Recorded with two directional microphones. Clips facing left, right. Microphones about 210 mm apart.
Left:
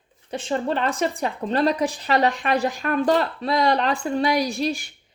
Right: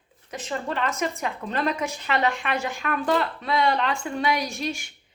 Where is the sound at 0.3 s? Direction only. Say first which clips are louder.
Left 6 dB; 30° left (ahead or behind).